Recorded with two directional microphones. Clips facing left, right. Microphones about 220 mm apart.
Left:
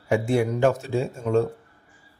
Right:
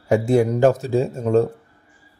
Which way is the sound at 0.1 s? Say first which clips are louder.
Right 5 dB; 40° right (ahead or behind).